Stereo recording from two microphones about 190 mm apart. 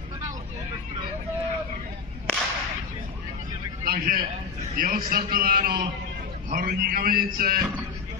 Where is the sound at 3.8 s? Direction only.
50° right (ahead or behind).